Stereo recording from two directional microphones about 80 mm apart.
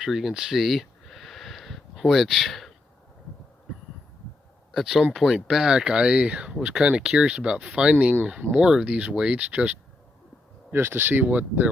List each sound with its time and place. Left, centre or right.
0.0 s a sound: centre
4.7 s speech: centre
10.7 s speech: right